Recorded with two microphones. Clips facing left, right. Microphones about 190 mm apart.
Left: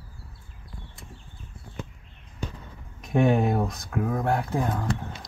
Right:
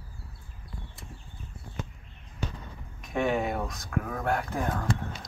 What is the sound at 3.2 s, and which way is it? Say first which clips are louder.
Speech: left 5 dB; 30° left (ahead or behind).